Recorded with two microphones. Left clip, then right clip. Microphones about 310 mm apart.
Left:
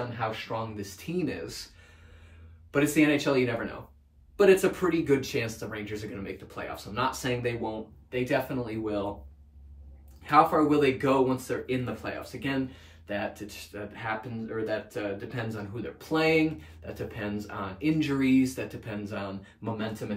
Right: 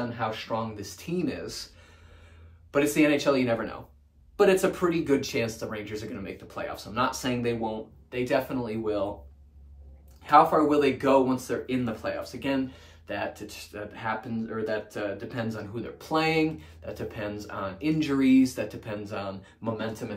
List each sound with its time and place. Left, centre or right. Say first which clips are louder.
0.3 s speech: right 2 dB; centre
2.7 s speech: right 1 dB; centre
10.2 s speech: right 2 dB; centre